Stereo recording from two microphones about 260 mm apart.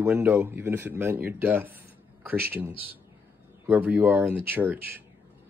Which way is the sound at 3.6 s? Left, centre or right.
Centre.